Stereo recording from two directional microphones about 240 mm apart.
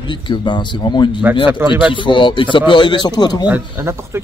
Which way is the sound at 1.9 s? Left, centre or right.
Centre.